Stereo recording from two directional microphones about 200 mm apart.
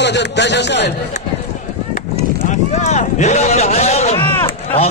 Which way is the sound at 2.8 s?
35° left (ahead or behind).